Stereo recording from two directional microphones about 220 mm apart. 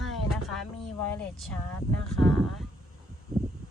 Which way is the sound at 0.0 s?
Centre (ahead or behind).